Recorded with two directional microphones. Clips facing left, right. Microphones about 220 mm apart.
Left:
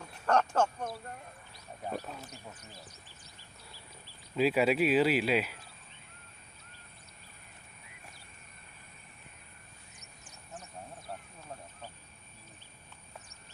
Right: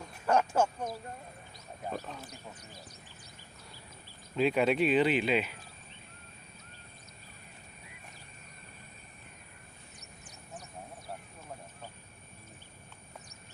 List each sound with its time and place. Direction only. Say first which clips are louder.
0.3 s speech: right 1 dB; 10° right (ahead or behind)
4.4 s speech: even; 5° left (ahead or behind)